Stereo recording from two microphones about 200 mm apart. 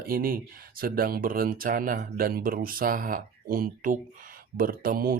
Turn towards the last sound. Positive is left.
turn(degrees=-45)  # may be behind; listen again after turning